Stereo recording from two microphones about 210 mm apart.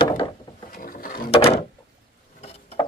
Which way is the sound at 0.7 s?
40° left (ahead or behind).